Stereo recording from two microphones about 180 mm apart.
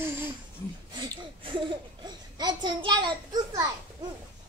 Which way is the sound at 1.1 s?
30° right (ahead or behind).